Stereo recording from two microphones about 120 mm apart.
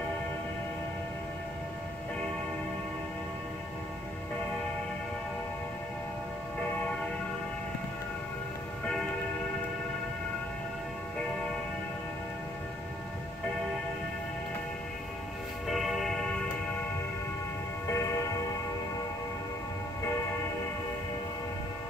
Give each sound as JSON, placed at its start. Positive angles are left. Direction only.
{"t": 15.7, "sound": "music", "side_deg": 0}
{"t": 17.8, "sound": "music", "side_deg": 25}